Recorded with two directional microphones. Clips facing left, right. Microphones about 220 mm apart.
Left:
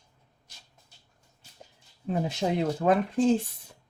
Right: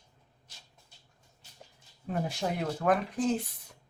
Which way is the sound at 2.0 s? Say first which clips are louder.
Left 4 dB; 20° left (ahead or behind).